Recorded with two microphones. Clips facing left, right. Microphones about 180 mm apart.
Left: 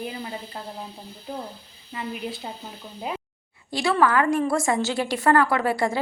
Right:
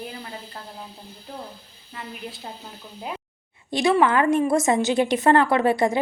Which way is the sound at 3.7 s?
20° right (ahead or behind).